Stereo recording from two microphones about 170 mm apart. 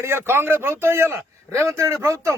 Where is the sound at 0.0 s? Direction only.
15° right (ahead or behind).